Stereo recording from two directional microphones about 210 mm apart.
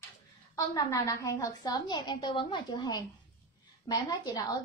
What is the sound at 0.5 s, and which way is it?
A woman's voice, 15° left (ahead or behind).